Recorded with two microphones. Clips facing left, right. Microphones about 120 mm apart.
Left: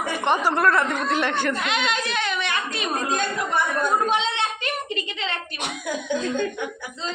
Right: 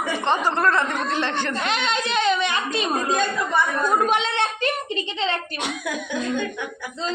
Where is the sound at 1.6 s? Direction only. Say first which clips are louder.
Right 1 dB; 30° right (ahead or behind).